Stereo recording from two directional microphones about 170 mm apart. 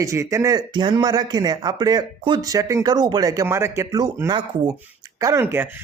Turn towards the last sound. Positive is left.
turn(degrees=-15)  # may be behind; listen again after turning